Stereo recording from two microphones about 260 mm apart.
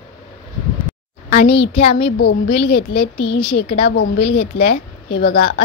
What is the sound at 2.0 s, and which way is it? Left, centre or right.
Speech, left.